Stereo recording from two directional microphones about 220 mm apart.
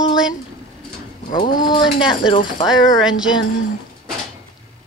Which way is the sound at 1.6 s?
20° left (ahead or behind).